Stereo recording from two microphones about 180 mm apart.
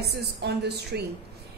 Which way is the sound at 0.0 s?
65° right (ahead or behind).